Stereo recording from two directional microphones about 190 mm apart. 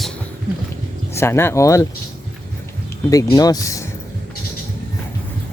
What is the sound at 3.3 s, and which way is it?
Speech, 20° left (ahead or behind).